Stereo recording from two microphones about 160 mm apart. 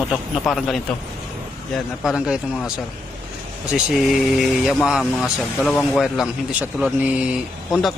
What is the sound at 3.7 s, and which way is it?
Speech, centre (ahead or behind).